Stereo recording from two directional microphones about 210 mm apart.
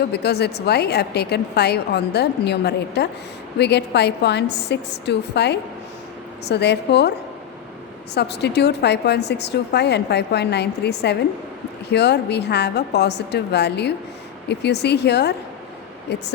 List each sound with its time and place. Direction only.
0.1 s speech: 50° left (ahead or behind)
8.1 s speech: 50° left (ahead or behind)